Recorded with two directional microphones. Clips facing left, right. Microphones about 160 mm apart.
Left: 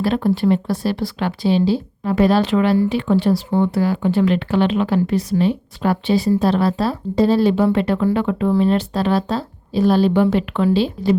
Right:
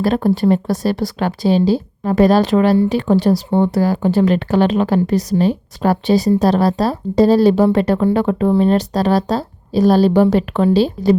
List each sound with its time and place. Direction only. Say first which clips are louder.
0.0 s speech: right 3 dB; 40° right (ahead or behind)